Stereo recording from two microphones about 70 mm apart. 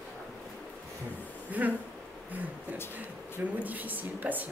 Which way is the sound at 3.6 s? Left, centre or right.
Right.